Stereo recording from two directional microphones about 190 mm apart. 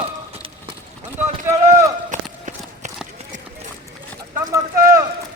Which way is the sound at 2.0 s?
40° right (ahead or behind).